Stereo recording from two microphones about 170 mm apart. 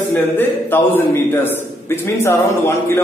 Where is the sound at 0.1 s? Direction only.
10° left (ahead or behind).